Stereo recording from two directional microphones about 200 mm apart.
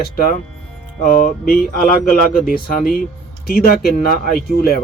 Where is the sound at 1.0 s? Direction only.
45° left (ahead or behind).